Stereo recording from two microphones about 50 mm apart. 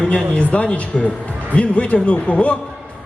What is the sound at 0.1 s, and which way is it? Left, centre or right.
A man's voice, left.